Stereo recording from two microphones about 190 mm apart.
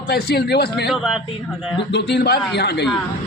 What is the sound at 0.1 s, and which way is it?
Speech, 55° left (ahead or behind).